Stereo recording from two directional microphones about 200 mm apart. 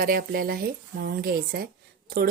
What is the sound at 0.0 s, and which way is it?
Speech, 45° right (ahead or behind).